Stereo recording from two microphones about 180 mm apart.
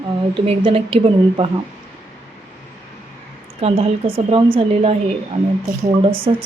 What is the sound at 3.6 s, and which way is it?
A woman's voice, 35° right (ahead or behind).